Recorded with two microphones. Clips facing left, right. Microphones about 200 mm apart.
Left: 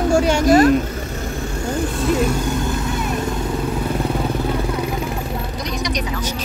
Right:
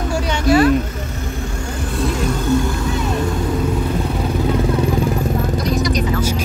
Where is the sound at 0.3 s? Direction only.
40° left (ahead or behind).